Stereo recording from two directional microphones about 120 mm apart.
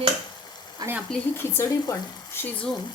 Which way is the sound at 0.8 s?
35° right (ahead or behind).